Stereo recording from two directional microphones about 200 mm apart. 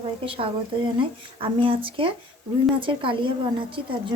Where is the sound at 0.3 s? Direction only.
25° right (ahead or behind).